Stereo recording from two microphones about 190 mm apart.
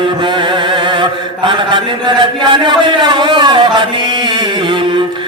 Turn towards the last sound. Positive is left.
turn(degrees=-25)  # may be behind; listen again after turning